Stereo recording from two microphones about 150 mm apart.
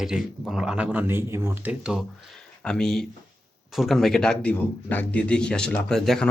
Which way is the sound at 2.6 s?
5° left (ahead or behind).